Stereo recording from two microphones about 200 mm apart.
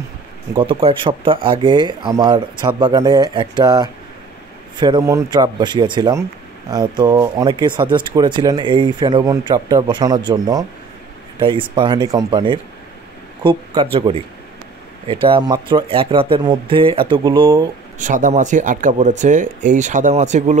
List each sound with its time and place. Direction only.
0.6 s speech: 25° right (ahead or behind)
17.9 s speech: 40° right (ahead or behind)